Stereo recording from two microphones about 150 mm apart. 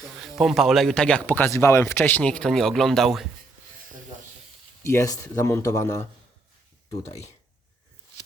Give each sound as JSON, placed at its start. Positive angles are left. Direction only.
{"t": 0.2, "sound": "speech", "side_deg": 0}
{"t": 4.8, "sound": "speech", "side_deg": 20}